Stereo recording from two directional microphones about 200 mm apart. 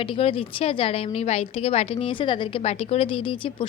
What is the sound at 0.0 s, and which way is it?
A woman's voice, 25° left (ahead or behind).